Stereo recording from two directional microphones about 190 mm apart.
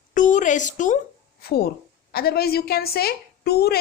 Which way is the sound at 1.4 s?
55° left (ahead or behind).